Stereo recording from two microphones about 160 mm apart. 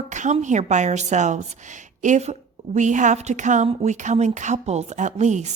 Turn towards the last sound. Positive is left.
turn(degrees=-45)  # may be behind; listen again after turning